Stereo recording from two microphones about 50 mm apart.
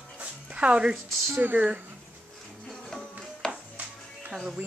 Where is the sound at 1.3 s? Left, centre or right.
Right.